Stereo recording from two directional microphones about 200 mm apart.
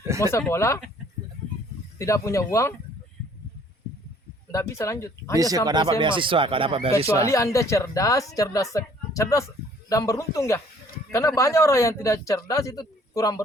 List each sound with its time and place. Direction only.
0.3 s speech: 15° left (ahead or behind)
2.0 s speech: 15° left (ahead or behind)
4.5 s speech: 15° left (ahead or behind)
5.6 s speech: 20° right (ahead or behind)
7.2 s speech: 15° left (ahead or behind)